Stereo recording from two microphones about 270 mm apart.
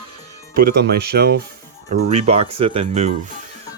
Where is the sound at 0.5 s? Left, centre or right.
Right.